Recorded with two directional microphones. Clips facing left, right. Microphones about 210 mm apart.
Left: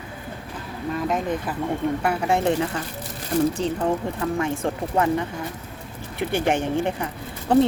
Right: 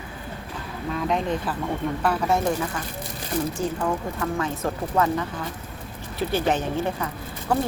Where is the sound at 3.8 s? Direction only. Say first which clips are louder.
Left 2 dB; 30° left (ahead or behind).